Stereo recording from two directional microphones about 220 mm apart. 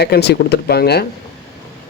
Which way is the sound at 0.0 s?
50° left (ahead or behind).